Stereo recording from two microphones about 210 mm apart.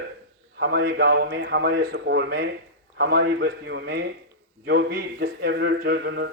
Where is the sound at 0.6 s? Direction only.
50° right (ahead or behind).